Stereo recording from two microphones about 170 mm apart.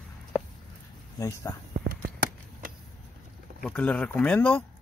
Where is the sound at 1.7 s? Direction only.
60° right (ahead or behind).